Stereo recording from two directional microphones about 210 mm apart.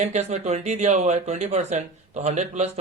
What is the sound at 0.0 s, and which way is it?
Speech, 35° right (ahead or behind).